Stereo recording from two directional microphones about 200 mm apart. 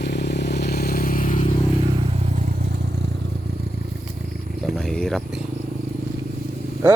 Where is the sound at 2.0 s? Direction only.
30° right (ahead or behind).